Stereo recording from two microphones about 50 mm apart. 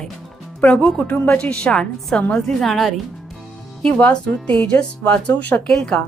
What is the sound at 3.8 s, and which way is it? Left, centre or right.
Speech, left.